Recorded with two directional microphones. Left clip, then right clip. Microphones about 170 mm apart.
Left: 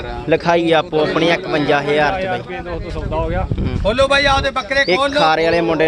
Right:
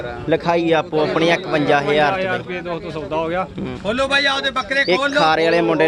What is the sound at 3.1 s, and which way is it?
Speech, 65° right (ahead or behind).